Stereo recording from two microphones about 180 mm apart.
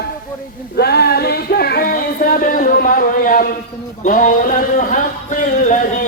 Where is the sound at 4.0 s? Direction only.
45° left (ahead or behind).